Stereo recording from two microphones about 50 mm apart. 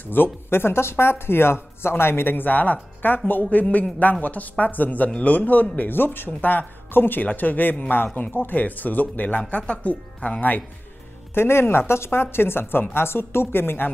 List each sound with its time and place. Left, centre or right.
0.0 s speech: left
11.3 s speech: left